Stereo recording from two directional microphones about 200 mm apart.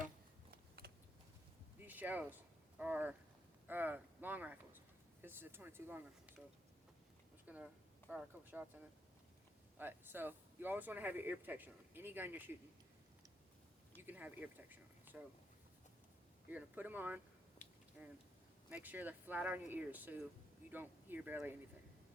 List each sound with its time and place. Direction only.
0.8 s computer keyboard: 50° right (ahead or behind)
1.8 s a sound: 10° right (ahead or behind)
2.7 s speech: 5° right (ahead or behind)
7.4 s speech: 5° right (ahead or behind)
9.7 s speech: 10° right (ahead or behind)
13.9 s speech: 10° right (ahead or behind)
16.5 s speech: 10° right (ahead or behind)